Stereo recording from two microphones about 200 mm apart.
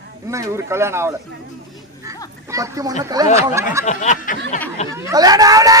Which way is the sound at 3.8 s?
35° left (ahead or behind).